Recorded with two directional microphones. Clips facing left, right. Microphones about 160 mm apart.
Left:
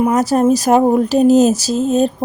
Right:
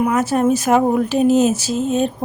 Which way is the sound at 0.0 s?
35° left (ahead or behind).